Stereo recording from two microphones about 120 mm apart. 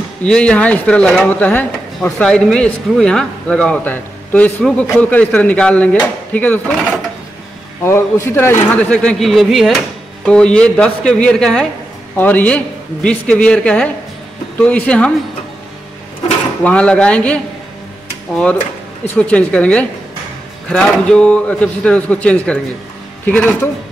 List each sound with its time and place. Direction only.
0.2 s speech: 10° left (ahead or behind)
7.8 s speech: 20° left (ahead or behind)
8.9 s speech: 5° left (ahead or behind)
16.6 s speech: 10° left (ahead or behind)